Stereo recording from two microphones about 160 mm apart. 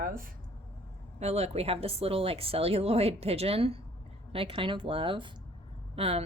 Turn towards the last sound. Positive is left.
turn(degrees=-40)  # may be behind; listen again after turning